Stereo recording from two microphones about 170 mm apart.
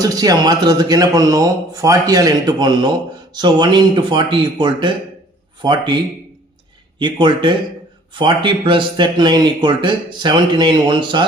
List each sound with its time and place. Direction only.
0.0 s speech: 20° right (ahead or behind)
7.0 s speech: 30° right (ahead or behind)